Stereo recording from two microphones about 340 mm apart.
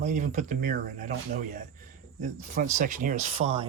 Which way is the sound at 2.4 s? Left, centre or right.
Right.